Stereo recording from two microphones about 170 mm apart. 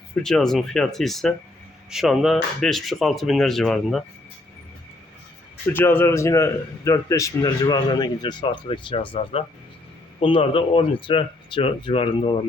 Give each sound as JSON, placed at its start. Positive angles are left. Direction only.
{"t": 0.2, "sound": "speech", "side_deg": 5}
{"t": 5.7, "sound": "a man's voice", "side_deg": 15}